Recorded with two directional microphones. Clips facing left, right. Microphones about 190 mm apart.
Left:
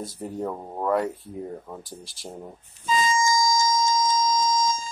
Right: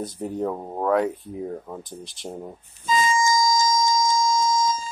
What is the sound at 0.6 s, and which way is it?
Speech, 15° right (ahead or behind).